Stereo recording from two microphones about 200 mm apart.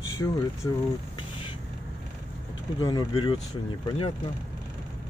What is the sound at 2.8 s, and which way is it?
Speech, 20° left (ahead or behind).